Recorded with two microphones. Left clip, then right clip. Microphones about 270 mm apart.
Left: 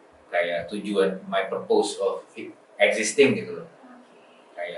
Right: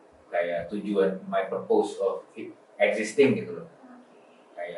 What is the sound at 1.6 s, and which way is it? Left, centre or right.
Speech, right.